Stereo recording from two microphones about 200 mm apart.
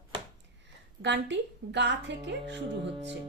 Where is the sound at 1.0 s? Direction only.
60° right (ahead or behind).